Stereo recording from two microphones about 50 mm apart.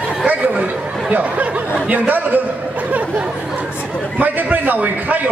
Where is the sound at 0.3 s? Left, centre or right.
Right.